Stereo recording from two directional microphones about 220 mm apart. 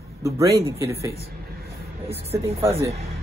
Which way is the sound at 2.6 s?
10° right (ahead or behind).